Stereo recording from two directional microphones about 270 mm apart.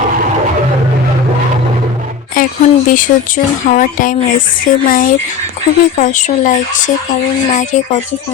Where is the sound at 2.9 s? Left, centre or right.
Left.